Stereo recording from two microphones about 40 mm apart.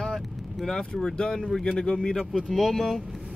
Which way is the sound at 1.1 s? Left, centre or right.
Left.